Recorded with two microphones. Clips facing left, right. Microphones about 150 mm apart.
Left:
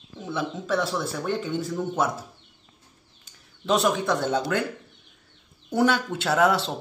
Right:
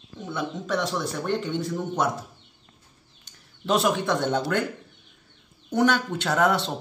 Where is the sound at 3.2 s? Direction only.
Centre (ahead or behind).